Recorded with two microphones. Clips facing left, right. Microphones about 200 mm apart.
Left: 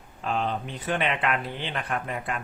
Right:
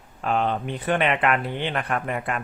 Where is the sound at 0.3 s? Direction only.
60° right (ahead or behind).